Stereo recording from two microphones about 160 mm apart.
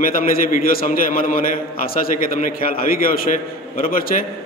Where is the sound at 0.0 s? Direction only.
60° left (ahead or behind).